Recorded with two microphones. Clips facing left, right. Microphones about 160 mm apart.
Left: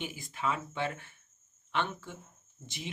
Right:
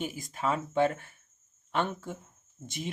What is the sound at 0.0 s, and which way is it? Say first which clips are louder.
Speech: right 3 dB; 40° right (ahead or behind).